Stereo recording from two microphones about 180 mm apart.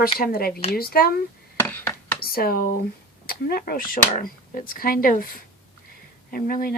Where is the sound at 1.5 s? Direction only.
10° left (ahead or behind).